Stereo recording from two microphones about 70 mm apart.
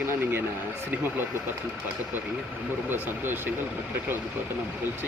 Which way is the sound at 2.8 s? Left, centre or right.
Right.